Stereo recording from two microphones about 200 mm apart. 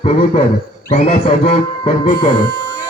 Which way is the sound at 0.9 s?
35° left (ahead or behind).